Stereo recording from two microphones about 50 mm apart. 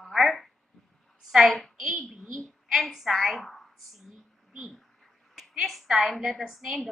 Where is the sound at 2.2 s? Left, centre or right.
Centre.